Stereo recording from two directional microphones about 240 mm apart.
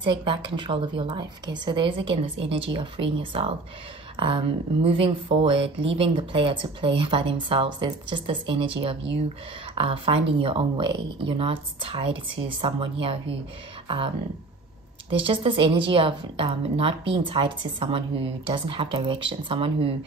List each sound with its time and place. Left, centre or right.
0.0 s a woman's voice: right